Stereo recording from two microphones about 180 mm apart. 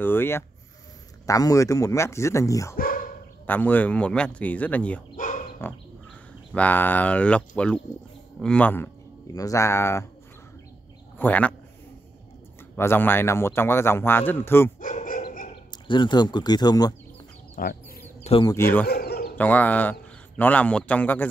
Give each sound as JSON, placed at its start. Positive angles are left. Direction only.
{"t": 0.0, "sound": "speech", "side_deg": 10}
{"t": 2.8, "sound": "dog", "side_deg": 50}
{"t": 3.4, "sound": "speech", "side_deg": 10}
{"t": 5.1, "sound": "dog", "side_deg": 45}
{"t": 5.6, "sound": "speech", "side_deg": 10}
{"t": 11.1, "sound": "speech", "side_deg": 10}
{"t": 12.7, "sound": "speech", "side_deg": 10}
{"t": 14.8, "sound": "dog", "side_deg": 45}
{"t": 15.7, "sound": "speech", "side_deg": 25}
{"t": 17.6, "sound": "chicken", "side_deg": 50}
{"t": 18.2, "sound": "a sound", "side_deg": 30}
{"t": 18.5, "sound": "speech", "side_deg": 10}
{"t": 18.9, "sound": "a sound", "side_deg": 60}
{"t": 19.3, "sound": "speech", "side_deg": 10}